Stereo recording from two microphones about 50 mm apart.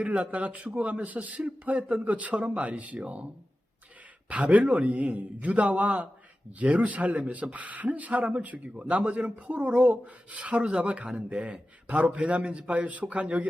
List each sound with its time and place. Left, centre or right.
0.0 s speech: right
4.3 s speech: right